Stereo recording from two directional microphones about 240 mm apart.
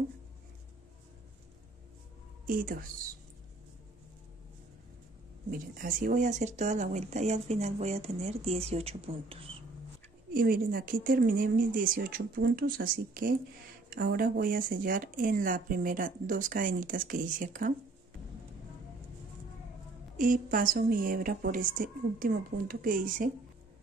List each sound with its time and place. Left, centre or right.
2.4 s a woman's voice: right
5.5 s speech: right
10.3 s speech: right
20.2 s speech: right